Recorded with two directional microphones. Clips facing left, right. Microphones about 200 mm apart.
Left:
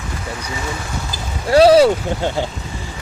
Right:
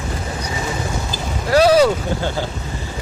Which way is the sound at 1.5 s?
30° left (ahead or behind).